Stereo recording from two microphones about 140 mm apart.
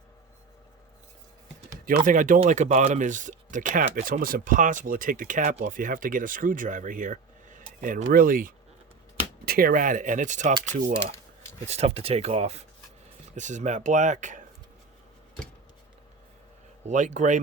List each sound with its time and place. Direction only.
1.7 s speech: 70° right (ahead or behind)
2.5 s speech: 60° right (ahead or behind); by 5.4 s 75° right (ahead or behind)
5.4 s speech: 65° right (ahead or behind)
11.6 s speech: 50° right (ahead or behind)
16.8 s speech: 60° right (ahead or behind)